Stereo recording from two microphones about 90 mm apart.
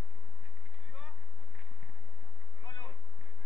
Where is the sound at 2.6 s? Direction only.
55° left (ahead or behind).